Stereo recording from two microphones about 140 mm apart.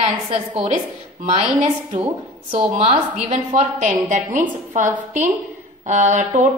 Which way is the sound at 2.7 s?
50° right (ahead or behind).